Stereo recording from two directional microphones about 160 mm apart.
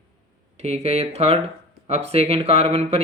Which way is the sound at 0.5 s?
40° right (ahead or behind).